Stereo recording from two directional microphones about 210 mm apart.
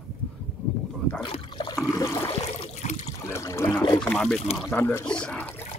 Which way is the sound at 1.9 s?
15° left (ahead or behind).